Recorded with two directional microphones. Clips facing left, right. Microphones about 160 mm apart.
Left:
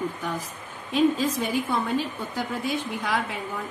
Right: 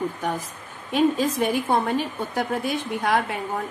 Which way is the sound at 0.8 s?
60° right (ahead or behind).